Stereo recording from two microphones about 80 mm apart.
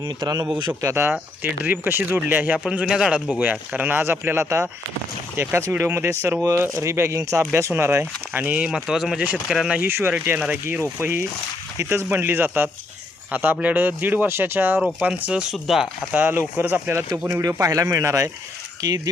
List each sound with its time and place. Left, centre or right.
0.0 s a man's voice: right
0.8 s speech: right
1.4 s speech: right
2.6 s speech: centre
9.9 s speech: right
14.8 s speech: centre
15.0 s speech: centre
16.1 s speech: centre
16.9 s speech: right